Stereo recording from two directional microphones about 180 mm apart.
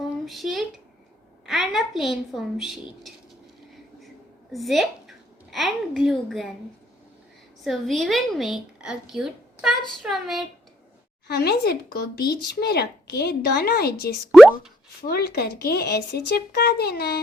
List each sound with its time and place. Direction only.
0.3 s a woman's voice: centre (ahead or behind)
4.5 s a woman's voice: centre (ahead or behind)
7.6 s a woman's voice: centre (ahead or behind)
11.3 s speech: 65° left (ahead or behind)
14.3 s a woman's voice: centre (ahead or behind)
15.0 s speech: 60° left (ahead or behind)